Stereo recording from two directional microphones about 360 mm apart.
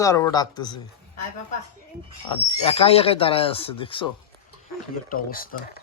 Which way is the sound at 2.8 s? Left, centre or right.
Centre.